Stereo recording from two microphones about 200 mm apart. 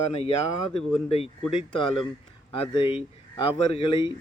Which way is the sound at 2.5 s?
25° left (ahead or behind).